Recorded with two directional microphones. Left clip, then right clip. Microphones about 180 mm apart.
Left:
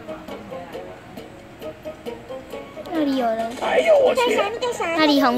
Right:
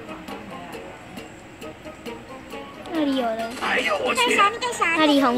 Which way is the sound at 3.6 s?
30° right (ahead or behind).